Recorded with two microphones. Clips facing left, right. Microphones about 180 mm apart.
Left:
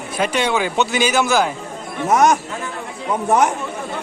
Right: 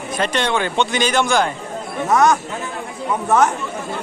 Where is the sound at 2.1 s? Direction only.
20° left (ahead or behind).